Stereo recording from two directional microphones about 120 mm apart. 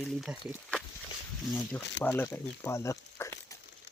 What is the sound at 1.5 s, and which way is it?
Speech, 15° left (ahead or behind).